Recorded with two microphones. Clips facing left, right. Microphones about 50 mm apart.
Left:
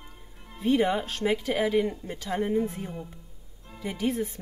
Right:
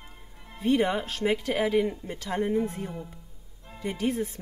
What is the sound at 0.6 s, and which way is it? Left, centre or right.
Speech, centre.